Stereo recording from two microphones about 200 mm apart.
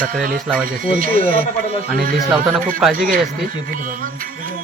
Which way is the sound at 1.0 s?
45° right (ahead or behind).